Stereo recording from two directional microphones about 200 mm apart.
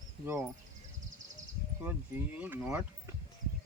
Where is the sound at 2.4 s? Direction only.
10° right (ahead or behind).